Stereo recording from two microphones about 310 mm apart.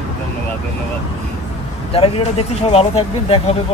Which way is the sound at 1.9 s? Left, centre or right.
Centre.